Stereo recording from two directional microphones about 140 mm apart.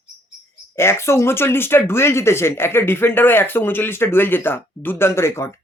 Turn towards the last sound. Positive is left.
turn(degrees=20)  # may be behind; listen again after turning